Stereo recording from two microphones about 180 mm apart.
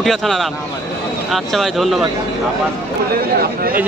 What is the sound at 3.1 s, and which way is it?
Speech, 55° right (ahead or behind).